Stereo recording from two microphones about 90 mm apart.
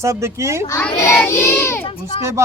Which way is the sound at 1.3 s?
30° left (ahead or behind).